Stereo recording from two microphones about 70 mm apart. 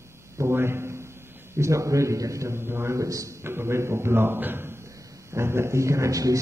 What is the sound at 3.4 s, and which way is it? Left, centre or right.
A man's voice, right.